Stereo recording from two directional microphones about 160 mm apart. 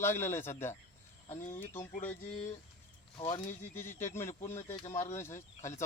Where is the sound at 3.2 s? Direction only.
30° left (ahead or behind).